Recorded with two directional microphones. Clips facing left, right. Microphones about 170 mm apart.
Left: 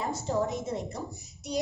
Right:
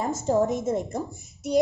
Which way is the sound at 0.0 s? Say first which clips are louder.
Right 6 dB; 50° right (ahead or behind).